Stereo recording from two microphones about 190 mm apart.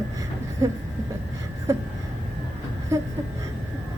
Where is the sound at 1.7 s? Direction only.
15° right (ahead or behind).